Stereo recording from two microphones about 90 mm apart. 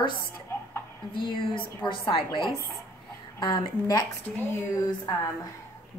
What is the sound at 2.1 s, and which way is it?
Speech, 65° left (ahead or behind).